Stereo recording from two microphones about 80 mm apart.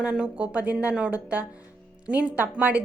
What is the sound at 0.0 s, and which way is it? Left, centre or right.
A woman's voice, centre.